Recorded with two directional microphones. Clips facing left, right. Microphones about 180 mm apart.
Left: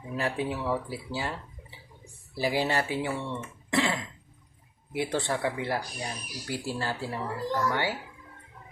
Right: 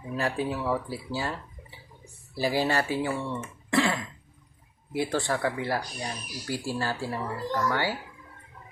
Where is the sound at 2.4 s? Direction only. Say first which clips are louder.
Right 1 dB; 20° left (ahead or behind).